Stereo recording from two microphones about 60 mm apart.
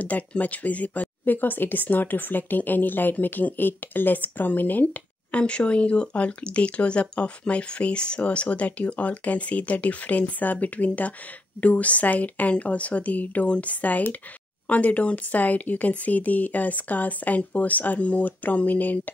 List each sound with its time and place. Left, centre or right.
0.0 s speech: left
5.3 s speech: centre